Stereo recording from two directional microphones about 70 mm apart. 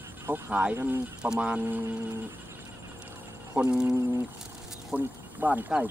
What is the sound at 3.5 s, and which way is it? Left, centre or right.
Speech, centre.